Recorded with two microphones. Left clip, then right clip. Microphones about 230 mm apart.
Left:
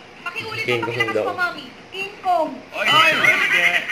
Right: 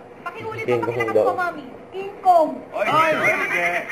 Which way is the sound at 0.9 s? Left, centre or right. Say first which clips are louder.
Right 2 dB; centre.